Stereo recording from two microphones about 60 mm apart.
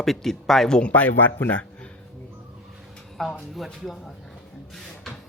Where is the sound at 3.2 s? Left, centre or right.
Centre.